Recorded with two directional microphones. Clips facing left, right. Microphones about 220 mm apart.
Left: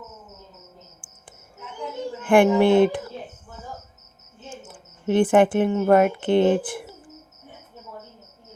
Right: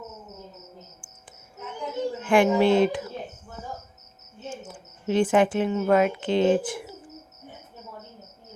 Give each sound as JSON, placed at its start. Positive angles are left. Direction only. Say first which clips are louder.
{"t": 2.2, "sound": "speech", "louder": "left 3 dB", "side_deg": 55}
{"t": 4.4, "sound": "cricket", "louder": "right 3 dB", "side_deg": 90}
{"t": 5.1, "sound": "speech", "louder": "left 4 dB", "side_deg": 55}